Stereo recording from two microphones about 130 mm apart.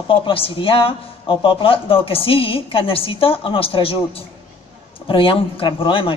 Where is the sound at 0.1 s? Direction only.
45° left (ahead or behind).